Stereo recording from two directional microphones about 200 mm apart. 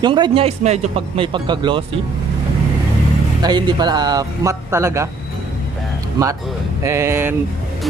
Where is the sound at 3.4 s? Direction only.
20° right (ahead or behind).